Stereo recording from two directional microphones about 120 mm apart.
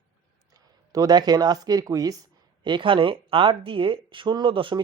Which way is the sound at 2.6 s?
45° right (ahead or behind).